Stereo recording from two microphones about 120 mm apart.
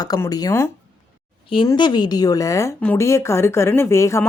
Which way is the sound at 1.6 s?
40° left (ahead or behind).